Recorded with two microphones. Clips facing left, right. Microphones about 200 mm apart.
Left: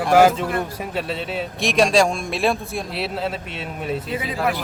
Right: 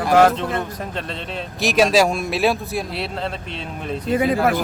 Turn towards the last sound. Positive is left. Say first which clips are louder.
# right 9 dB
turn(degrees=-50)  # may be behind; listen again after turning